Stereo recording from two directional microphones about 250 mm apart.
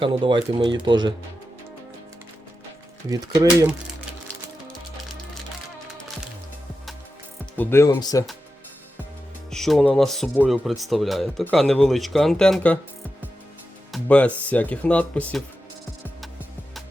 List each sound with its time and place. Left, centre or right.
0.0 s speech: centre
3.1 s speech: centre
7.5 s speech: centre
9.5 s speech: centre
13.9 s speech: centre